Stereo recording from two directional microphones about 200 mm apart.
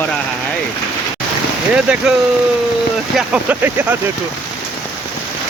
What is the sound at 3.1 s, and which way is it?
Speech, 5° right (ahead or behind).